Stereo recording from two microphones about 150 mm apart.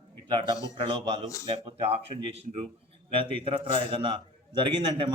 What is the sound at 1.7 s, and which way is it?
A man's voice, 40° right (ahead or behind).